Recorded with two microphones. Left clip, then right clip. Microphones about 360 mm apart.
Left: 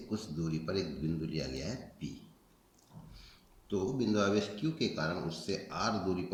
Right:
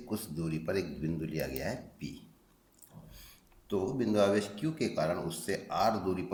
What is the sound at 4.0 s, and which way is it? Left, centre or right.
Speech, centre.